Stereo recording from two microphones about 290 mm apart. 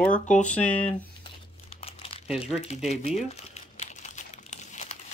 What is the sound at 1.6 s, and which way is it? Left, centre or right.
Crumpling, centre.